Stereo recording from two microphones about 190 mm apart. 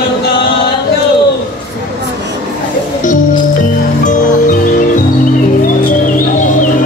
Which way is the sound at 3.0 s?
40° left (ahead or behind).